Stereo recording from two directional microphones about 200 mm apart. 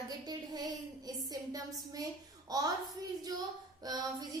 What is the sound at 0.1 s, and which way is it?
Speech, 20° right (ahead or behind).